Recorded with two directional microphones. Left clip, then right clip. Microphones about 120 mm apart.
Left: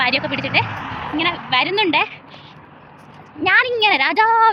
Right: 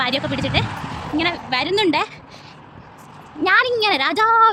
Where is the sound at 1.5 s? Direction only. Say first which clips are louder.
Left 3 dB; 45° right (ahead or behind).